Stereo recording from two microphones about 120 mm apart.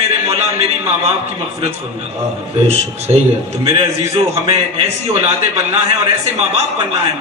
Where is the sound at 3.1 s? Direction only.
55° right (ahead or behind).